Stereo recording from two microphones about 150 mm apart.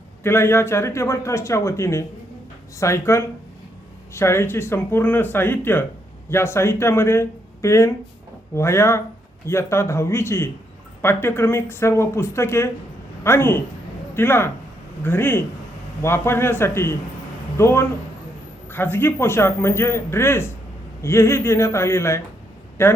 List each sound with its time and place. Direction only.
0.2 s a man's voice: 15° left (ahead or behind)